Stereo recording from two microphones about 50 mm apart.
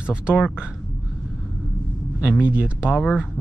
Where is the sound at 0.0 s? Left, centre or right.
Right.